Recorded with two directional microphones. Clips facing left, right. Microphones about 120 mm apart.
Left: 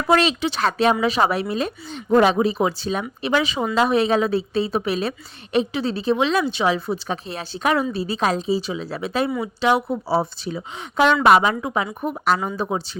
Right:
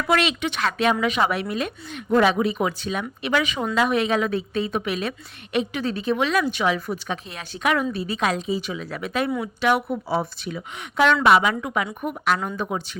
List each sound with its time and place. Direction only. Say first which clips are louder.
0.1 s speech: left 4 dB; 35° left (ahead or behind)
12.5 s speech: left 3 dB; 25° left (ahead or behind)